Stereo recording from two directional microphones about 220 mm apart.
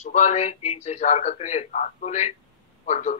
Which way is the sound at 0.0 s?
30° left (ahead or behind).